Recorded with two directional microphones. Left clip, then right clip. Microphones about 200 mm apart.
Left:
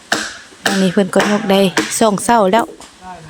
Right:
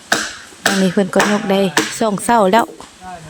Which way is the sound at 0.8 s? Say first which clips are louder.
Left 2 dB; 5° left (ahead or behind).